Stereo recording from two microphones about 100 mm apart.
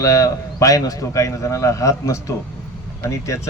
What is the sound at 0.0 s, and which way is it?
Speech, 35° left (ahead or behind).